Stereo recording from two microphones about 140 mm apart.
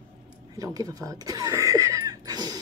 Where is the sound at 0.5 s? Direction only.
25° right (ahead or behind).